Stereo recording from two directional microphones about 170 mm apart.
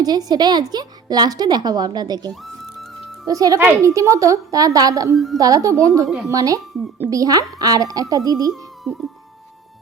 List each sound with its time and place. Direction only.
0.0 s a woman's voice: 25° right (ahead or behind)
2.3 s music: centre (ahead or behind)
3.2 s a woman's voice: 20° right (ahead or behind)
5.1 s a woman's voice: centre (ahead or behind)
5.4 s a woman's voice: 20° right (ahead or behind)